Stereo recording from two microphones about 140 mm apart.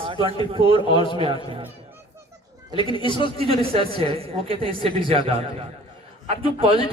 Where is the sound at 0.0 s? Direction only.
40° right (ahead or behind).